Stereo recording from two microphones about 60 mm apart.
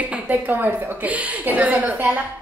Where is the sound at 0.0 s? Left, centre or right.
Right.